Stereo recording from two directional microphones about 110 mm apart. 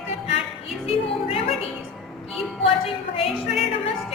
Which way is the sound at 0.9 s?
60° left (ahead or behind).